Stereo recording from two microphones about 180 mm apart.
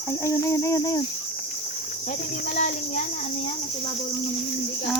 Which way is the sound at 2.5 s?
45° left (ahead or behind).